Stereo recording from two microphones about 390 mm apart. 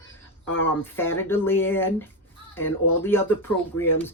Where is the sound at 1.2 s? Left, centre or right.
Centre.